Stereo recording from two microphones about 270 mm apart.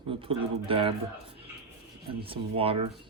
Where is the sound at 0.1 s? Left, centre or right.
Centre.